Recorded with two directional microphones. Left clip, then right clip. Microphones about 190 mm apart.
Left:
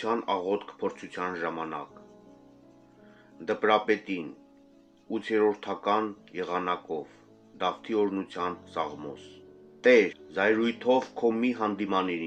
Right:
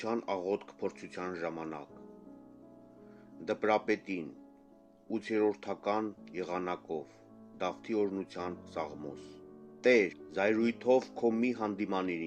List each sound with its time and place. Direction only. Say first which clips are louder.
0.0 s speech: left 6 dB; 60° right (ahead or behind)
3.4 s speech: left 6 dB; 70° right (ahead or behind)
5.1 s speech: left 6 dB; 65° right (ahead or behind)